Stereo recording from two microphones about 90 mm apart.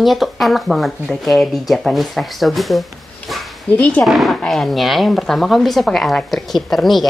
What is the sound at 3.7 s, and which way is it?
Speech, 15° left (ahead or behind).